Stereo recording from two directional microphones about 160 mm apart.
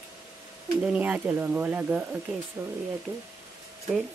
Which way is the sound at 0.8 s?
10° right (ahead or behind).